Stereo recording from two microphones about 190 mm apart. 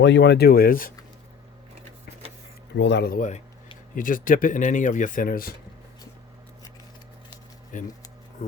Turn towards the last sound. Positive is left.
turn(degrees=40)  # may be behind; listen again after turning